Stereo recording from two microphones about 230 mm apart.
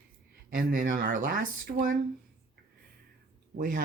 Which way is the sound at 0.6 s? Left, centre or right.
Right.